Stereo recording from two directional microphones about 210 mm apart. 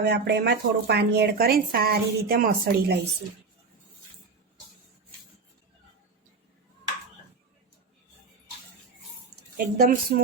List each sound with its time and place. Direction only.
0.0 s speech: 50° right (ahead or behind)
9.6 s a woman's voice: 40° right (ahead or behind)